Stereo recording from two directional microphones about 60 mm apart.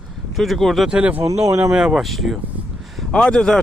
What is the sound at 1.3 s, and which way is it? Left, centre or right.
Speech, right.